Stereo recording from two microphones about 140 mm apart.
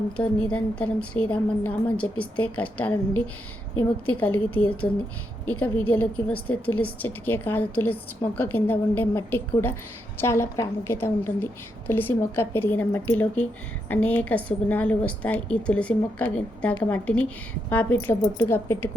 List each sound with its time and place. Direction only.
0.5 s a woman's voice: 10° left (ahead or behind)